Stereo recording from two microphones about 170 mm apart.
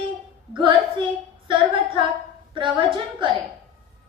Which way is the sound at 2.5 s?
30° right (ahead or behind).